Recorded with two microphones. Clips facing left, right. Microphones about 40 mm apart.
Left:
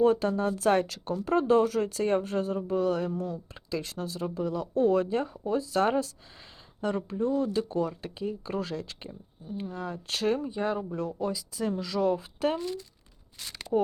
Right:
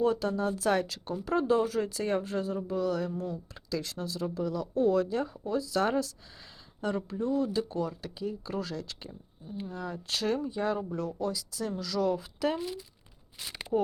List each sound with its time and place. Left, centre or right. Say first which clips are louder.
0.0 s speech: left 4 dB; left
10.5 s a woman's voice: left 1 dB; centre; by 12.5 s left
12.5 s speech: left 2 dB; centre